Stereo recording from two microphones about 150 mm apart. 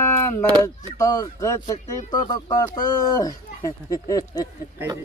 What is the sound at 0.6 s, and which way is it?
Speech, 20° left (ahead or behind).